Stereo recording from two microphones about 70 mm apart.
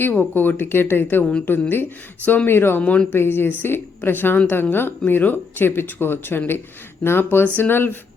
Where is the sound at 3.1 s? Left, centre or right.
Left.